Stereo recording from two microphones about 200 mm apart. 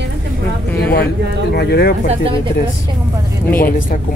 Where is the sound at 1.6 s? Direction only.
55° left (ahead or behind).